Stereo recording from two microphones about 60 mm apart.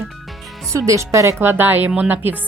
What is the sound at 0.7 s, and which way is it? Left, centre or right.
Speech, right.